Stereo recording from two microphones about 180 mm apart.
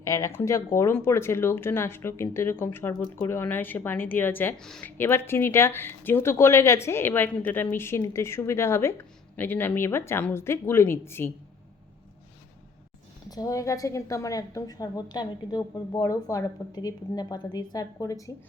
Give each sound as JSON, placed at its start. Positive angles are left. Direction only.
{"t": 0.0, "sound": "a woman's voice", "side_deg": 15}
{"t": 13.3, "sound": "a woman's voice", "side_deg": 20}